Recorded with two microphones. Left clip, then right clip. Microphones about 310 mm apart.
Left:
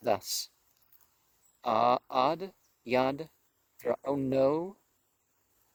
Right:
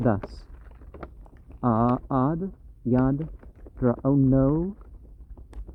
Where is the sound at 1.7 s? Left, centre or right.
Left.